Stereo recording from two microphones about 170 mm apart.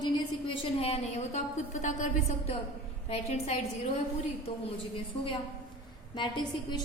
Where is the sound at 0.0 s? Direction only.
30° left (ahead or behind); by 2.0 s 45° left (ahead or behind).